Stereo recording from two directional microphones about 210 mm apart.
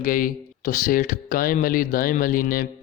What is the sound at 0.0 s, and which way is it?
Speech, 40° left (ahead or behind).